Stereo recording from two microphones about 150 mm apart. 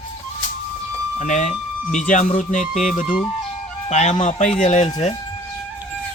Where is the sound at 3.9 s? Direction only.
50° left (ahead or behind).